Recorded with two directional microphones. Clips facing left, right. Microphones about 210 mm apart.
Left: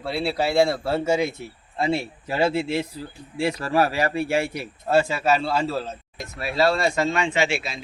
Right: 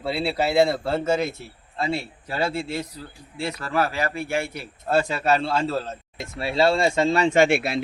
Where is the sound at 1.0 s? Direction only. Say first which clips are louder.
Left 2 dB; 10° left (ahead or behind).